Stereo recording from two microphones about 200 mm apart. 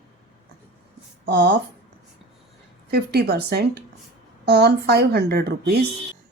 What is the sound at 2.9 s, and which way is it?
Speech, 50° right (ahead or behind).